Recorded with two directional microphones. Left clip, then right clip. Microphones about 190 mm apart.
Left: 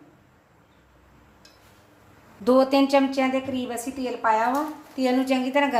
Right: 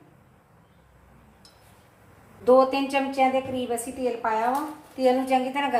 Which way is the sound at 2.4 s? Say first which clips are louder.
Even; 55° left (ahead or behind).